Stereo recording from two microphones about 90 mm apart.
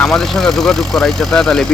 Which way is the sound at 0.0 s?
5° left (ahead or behind).